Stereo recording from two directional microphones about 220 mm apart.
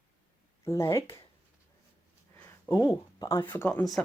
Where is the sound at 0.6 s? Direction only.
15° left (ahead or behind).